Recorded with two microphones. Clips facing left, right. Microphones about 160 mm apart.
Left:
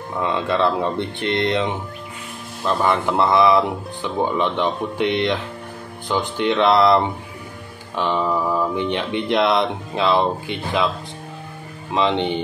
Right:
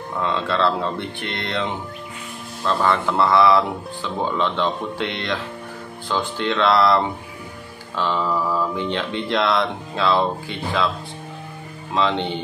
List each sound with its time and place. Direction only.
0.2 s speech: 15° left (ahead or behind)
7.9 s a sound: 15° left (ahead or behind)
8.7 s speech: 15° left (ahead or behind)
11.9 s speech: 20° left (ahead or behind)